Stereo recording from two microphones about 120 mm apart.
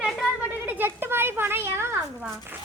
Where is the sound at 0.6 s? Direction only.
15° right (ahead or behind).